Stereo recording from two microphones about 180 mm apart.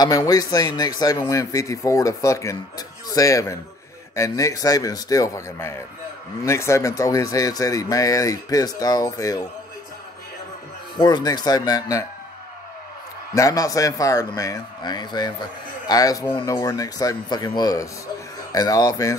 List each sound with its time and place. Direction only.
0.0 s speech: 20° left (ahead or behind)
11.0 s speech: 25° left (ahead or behind)
13.3 s speech: 20° left (ahead or behind)